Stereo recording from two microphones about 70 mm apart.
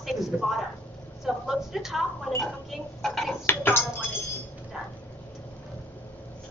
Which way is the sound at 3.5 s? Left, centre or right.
Left.